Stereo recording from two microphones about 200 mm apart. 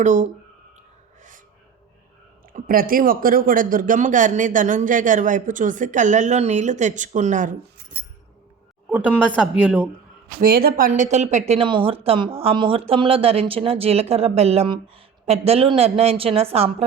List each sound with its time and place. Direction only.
0.0 s a man's voice: 35° right (ahead or behind)
2.5 s a man's voice: 45° right (ahead or behind)
9.6 s speech: 10° right (ahead or behind)
10.4 s a man's voice: 50° right (ahead or behind); by 16.7 s 30° right (ahead or behind)